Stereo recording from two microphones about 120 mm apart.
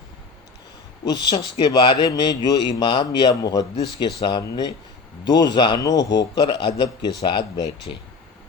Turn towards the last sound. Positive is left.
turn(degrees=35)  # may be behind; listen again after turning